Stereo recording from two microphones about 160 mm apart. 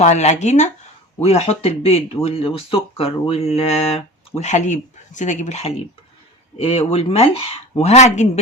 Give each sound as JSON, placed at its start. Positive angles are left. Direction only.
{"t": 0.0, "sound": "speech", "side_deg": 45}